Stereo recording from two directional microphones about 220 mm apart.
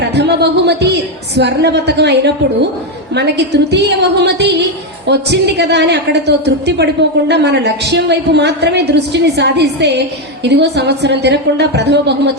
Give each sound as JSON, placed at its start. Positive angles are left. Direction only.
{"t": 0.0, "sound": "a woman's voice", "side_deg": -50}